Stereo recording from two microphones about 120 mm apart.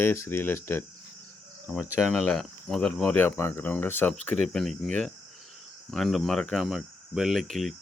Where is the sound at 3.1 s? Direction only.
15° left (ahead or behind).